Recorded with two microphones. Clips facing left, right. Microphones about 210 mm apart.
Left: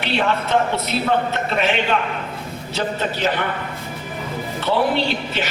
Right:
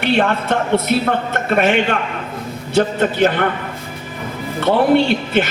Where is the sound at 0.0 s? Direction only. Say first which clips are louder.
Right 4 dB; 50° right (ahead or behind).